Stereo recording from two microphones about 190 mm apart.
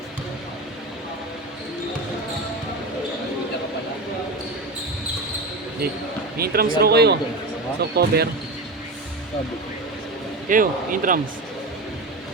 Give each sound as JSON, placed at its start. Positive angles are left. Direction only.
{"t": 6.3, "sound": "speech", "side_deg": -55}
{"t": 10.5, "sound": "speech", "side_deg": -45}